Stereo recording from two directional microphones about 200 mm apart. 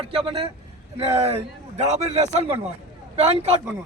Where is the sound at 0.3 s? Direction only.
25° right (ahead or behind).